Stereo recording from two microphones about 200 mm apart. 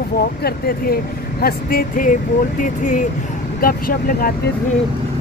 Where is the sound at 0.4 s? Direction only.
50° left (ahead or behind).